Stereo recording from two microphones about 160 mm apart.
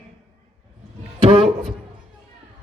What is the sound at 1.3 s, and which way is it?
Speech, 45° right (ahead or behind).